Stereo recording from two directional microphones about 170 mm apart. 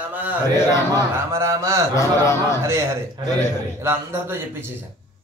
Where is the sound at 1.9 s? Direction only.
20° left (ahead or behind).